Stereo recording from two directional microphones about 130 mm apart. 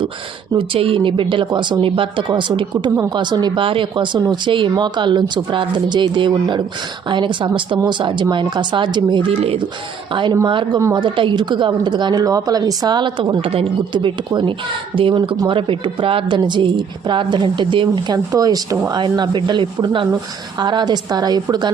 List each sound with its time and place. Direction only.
0.5 s a woman's voice: 45° right (ahead or behind)